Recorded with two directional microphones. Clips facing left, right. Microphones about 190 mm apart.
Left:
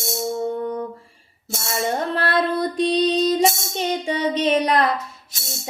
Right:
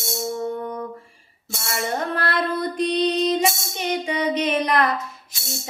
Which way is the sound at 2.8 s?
30° left (ahead or behind).